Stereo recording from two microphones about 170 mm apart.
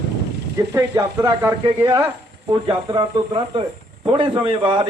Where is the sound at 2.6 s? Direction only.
25° right (ahead or behind).